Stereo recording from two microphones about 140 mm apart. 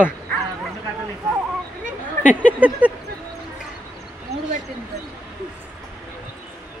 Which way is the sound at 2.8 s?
10° right (ahead or behind).